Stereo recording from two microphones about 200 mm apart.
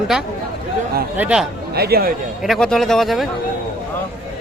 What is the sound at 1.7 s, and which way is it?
Speech, 50° right (ahead or behind).